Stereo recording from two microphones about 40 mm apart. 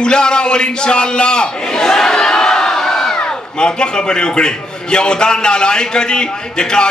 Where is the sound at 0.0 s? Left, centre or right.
Left.